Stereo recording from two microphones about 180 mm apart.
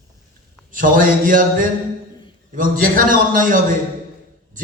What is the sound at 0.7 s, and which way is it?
A man's voice, 50° right (ahead or behind).